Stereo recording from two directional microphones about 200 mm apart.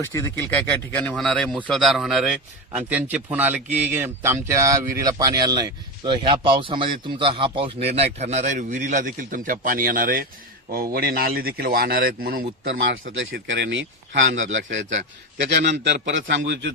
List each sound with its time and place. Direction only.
0.0 s a man's voice: 15° left (ahead or behind); by 12.5 s 45° right (ahead or behind)
13.1 s a man's voice: 65° right (ahead or behind)